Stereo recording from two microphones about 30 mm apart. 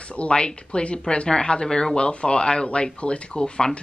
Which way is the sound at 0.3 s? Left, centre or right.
Left.